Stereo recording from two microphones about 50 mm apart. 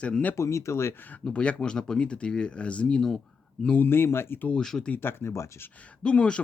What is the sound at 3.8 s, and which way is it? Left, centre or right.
Speech, left.